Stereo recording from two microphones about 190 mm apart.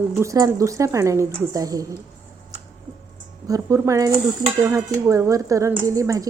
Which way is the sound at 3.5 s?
15° right (ahead or behind).